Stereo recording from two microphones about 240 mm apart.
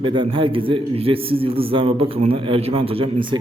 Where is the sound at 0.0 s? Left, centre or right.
Right.